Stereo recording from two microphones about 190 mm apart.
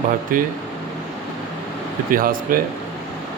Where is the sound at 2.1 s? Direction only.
50° right (ahead or behind).